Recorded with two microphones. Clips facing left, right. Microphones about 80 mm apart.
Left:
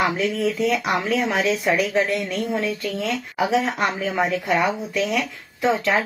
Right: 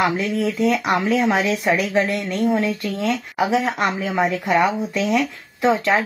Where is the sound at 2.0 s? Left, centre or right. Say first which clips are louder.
Right 1 dB; centre.